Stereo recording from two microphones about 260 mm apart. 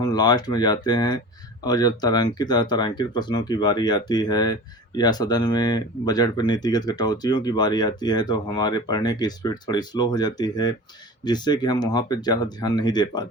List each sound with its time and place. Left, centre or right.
0.0 s speech: centre